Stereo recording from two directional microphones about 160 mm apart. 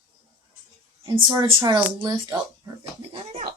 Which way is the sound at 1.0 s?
25° right (ahead or behind).